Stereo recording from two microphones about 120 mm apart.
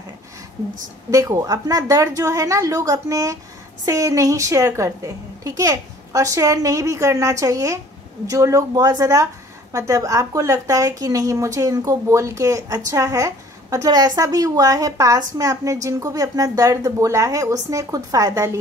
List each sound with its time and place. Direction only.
1.1 s a woman's voice: 30° right (ahead or behind)